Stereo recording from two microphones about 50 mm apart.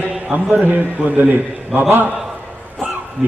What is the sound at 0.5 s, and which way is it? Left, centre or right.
A man's voice, right.